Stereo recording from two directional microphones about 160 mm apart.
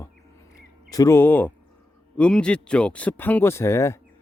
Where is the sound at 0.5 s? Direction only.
20° left (ahead or behind).